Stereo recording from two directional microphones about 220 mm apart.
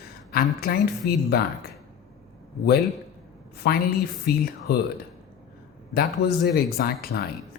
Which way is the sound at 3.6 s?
45° left (ahead or behind).